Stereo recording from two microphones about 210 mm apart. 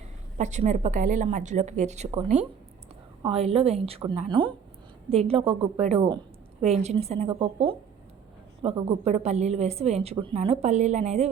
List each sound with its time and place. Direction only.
0.3 s a woman's voice: 35° right (ahead or behind)